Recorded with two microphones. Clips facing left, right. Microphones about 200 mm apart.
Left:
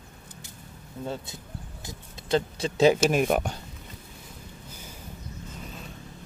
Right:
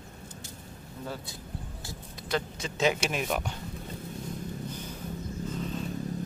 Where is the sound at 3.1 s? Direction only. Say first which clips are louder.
Left 7 dB; 50° left (ahead or behind).